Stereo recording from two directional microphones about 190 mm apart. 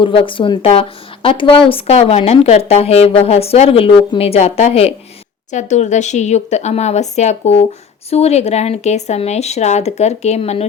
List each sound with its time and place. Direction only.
0.0 s a woman's voice: 25° left (ahead or behind)